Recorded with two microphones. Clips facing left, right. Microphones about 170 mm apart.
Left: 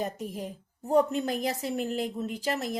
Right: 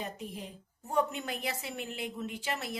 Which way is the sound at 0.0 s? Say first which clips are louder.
Left 7 dB; 45° left (ahead or behind).